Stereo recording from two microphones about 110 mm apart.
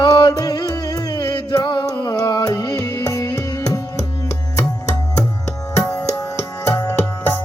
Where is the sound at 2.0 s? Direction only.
35° left (ahead or behind).